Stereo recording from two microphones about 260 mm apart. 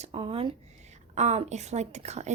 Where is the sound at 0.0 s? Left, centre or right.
Right.